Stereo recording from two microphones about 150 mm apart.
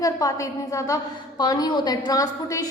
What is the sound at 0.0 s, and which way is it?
A woman's voice, 20° left (ahead or behind).